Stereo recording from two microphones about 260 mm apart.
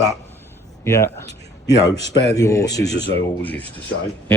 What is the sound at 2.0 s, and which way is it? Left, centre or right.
Speech, left.